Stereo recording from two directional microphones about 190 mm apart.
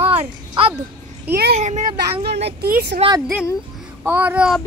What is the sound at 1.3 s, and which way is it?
Speech, 55° right (ahead or behind).